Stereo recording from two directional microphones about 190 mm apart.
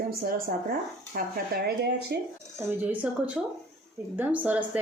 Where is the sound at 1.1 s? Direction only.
55° right (ahead or behind).